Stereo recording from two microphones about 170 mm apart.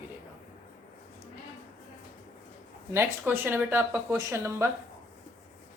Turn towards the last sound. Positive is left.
turn(degrees=-15)  # may be behind; listen again after turning